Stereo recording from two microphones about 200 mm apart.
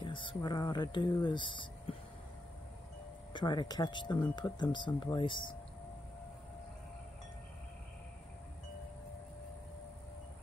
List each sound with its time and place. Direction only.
0.0 s speech: 25° left (ahead or behind)
3.3 s speech: 20° left (ahead or behind)